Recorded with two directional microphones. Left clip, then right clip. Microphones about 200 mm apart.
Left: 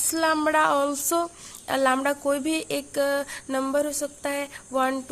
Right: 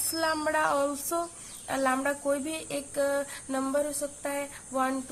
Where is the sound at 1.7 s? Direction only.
45° left (ahead or behind).